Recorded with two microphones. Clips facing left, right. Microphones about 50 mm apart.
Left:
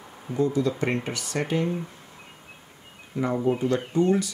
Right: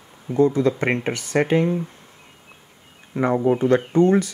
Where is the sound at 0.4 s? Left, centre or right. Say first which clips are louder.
Right 6 dB; right.